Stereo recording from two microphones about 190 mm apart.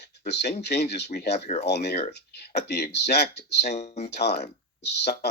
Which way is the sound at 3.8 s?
35° left (ahead or behind).